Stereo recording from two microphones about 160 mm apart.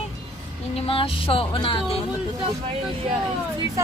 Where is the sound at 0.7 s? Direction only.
35° left (ahead or behind).